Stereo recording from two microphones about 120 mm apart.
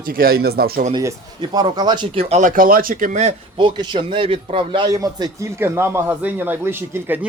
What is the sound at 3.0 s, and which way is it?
Speech, 80° right.